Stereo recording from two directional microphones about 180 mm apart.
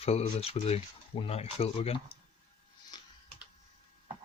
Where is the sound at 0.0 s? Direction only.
35° left (ahead or behind).